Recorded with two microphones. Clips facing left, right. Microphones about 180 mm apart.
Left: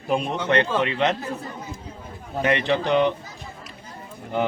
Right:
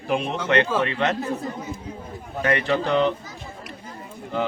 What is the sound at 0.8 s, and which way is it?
Speech, 20° left (ahead or behind).